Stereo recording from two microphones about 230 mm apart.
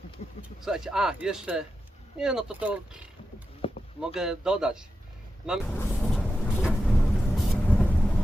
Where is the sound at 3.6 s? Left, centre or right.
Left.